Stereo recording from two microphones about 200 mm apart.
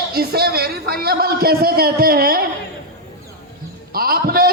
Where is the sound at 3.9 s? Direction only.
50° right (ahead or behind).